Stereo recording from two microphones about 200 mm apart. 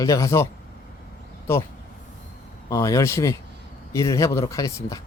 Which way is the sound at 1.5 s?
10° left (ahead or behind).